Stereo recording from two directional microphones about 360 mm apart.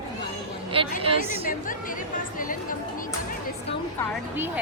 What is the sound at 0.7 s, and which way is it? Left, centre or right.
Speech, centre.